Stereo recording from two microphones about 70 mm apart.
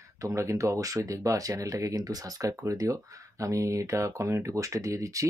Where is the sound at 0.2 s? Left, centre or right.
Right.